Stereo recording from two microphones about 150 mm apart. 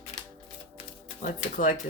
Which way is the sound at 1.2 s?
65° left (ahead or behind).